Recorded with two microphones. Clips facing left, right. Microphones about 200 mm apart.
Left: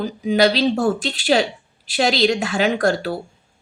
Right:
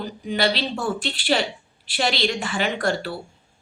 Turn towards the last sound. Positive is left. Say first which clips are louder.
# left 5 dB
turn(degrees=40)  # may be behind; listen again after turning